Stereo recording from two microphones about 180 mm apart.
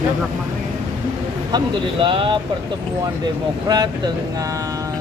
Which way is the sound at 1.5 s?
25° right (ahead or behind).